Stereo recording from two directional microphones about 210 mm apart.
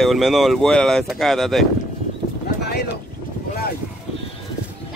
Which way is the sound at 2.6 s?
50° left (ahead or behind).